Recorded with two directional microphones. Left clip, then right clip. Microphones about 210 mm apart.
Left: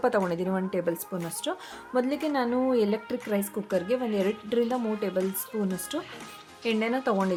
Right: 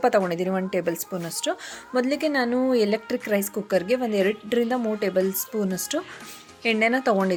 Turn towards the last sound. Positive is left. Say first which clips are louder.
# right 6 dB
turn(degrees=-5)  # may be behind; listen again after turning